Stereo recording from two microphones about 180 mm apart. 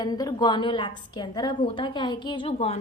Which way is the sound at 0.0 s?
20° left (ahead or behind).